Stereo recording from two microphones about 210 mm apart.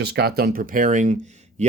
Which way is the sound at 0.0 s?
50° right (ahead or behind).